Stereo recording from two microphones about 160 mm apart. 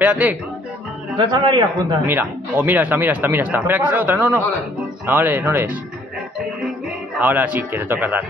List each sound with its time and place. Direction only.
0.0 s speech: 10° right (ahead or behind)
1.1 s a man's voice: 30° right (ahead or behind)
2.0 s speech: 10° right (ahead or behind)
7.2 s speech: 10° right (ahead or behind)